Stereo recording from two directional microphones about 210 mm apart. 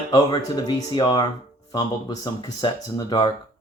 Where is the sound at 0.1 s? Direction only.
20° left (ahead or behind).